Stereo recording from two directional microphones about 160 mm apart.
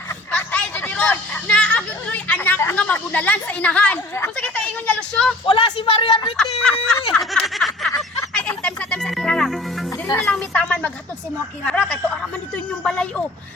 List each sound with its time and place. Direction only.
0.3 s speech: 5° left (ahead or behind)
5.5 s a man's voice: 35° left (ahead or behind)
6.7 s a sound: 5° left (ahead or behind)
8.3 s music: 5° left (ahead or behind)
10.2 s a sound: 10° left (ahead or behind)
11.6 s speech: 5° left (ahead or behind)